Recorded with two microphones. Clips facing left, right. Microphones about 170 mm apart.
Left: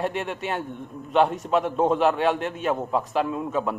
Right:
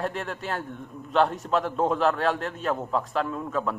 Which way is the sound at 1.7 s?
20° left (ahead or behind).